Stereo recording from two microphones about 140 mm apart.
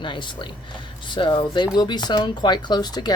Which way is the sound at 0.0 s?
35° left (ahead or behind).